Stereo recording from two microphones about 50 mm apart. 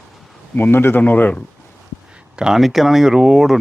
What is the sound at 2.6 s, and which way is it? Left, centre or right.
Speech, centre.